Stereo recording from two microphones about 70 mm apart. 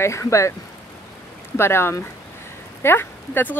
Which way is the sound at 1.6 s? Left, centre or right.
Left.